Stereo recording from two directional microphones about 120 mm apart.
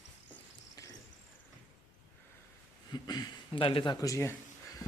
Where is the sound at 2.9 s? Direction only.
35° left (ahead or behind).